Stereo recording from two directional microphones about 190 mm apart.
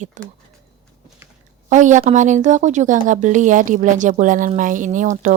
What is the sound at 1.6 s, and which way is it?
Speech, 40° right (ahead or behind).